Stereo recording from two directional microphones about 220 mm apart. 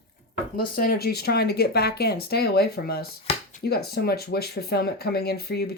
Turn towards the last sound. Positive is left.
turn(degrees=45)  # may be behind; listen again after turning